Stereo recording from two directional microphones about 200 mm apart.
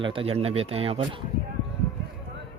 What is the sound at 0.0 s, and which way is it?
Speech, 25° right (ahead or behind).